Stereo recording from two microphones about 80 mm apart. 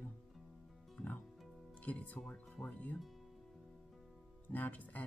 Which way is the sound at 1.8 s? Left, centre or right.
Centre.